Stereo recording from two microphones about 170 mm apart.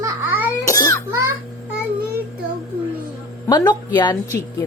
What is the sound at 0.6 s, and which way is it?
Baby cry, 20° left (ahead or behind).